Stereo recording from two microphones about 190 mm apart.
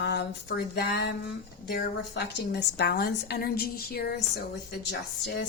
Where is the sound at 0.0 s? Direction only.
60° left (ahead or behind).